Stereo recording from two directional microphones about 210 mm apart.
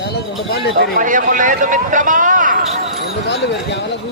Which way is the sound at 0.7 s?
40° right (ahead or behind).